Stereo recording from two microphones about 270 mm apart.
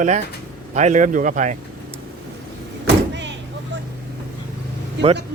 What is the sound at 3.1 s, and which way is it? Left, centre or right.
Vehicle, right.